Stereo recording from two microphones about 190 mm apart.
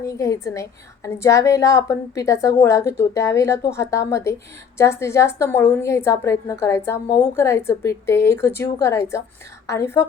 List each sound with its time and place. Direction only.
0.0 s a woman's voice: 15° left (ahead or behind)